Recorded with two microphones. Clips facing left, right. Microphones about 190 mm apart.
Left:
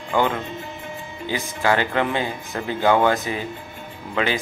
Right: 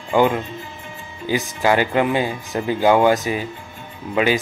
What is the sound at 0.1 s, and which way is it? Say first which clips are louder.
Speech: right 4 dB; 15° right (ahead or behind).